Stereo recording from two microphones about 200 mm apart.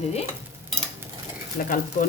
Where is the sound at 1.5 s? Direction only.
45° left (ahead or behind).